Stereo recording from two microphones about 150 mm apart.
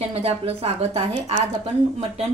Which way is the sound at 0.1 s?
40° right (ahead or behind).